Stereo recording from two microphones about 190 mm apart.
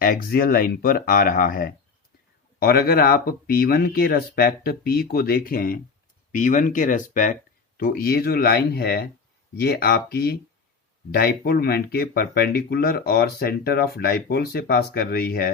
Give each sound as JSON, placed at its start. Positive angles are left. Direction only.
{"t": 0.0, "sound": "speech", "side_deg": 50}